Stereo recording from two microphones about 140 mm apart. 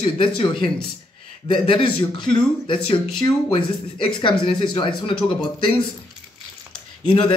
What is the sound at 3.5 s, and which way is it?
Speech, 40° left (ahead or behind).